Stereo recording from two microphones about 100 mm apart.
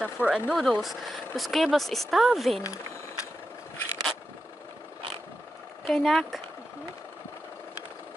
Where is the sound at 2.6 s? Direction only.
30° left (ahead or behind).